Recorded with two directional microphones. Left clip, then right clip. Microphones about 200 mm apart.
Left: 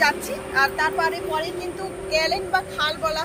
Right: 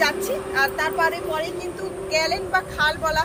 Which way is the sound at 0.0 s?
50° right (ahead or behind).